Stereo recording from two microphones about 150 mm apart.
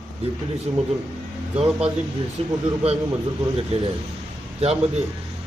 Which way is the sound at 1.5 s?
45° right (ahead or behind).